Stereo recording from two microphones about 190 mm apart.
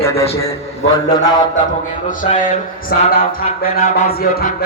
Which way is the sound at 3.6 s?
50° left (ahead or behind).